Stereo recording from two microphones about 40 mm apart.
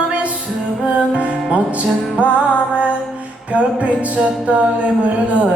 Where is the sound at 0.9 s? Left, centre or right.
Right.